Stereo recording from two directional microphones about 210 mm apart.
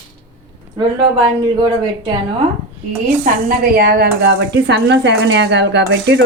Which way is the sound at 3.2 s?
45° right (ahead or behind).